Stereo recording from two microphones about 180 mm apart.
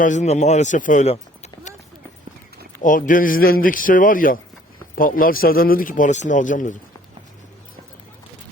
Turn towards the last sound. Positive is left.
turn(degrees=45)  # may be behind; listen again after turning